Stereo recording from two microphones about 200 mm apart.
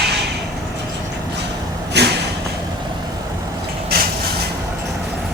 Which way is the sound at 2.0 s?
55° right (ahead or behind).